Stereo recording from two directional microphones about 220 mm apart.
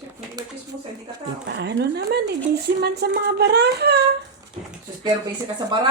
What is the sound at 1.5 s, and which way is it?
A woman's voice, 50° right (ahead or behind).